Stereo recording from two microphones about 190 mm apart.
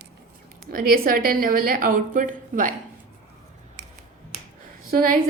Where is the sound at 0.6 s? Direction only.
50° right (ahead or behind).